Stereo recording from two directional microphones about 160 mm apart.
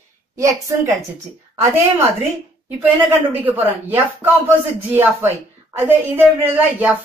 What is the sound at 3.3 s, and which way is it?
A woman's voice, 10° right (ahead or behind).